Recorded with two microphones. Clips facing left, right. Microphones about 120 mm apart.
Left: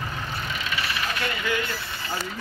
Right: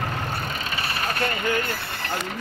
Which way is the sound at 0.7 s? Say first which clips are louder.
Right 1 dB; 45° right (ahead or behind).